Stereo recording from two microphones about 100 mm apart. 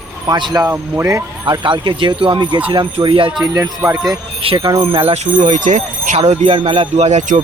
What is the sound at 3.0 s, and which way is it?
Speech, 60° right (ahead or behind).